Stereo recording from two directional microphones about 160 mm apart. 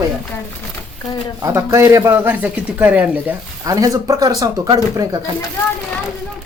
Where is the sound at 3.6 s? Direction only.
20° right (ahead or behind).